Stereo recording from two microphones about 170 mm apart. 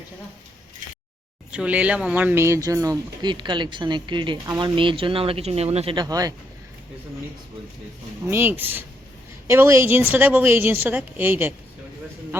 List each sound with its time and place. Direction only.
1.5 s speech: 5° right (ahead or behind); by 6.3 s 20° right (ahead or behind)
8.3 s speech: 15° right (ahead or behind)